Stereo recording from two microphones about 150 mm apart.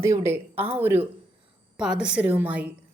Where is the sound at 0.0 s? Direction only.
20° right (ahead or behind).